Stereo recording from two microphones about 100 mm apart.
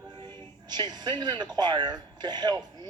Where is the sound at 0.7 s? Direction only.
45° right (ahead or behind).